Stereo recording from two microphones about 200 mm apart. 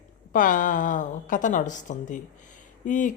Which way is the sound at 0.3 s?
40° left (ahead or behind).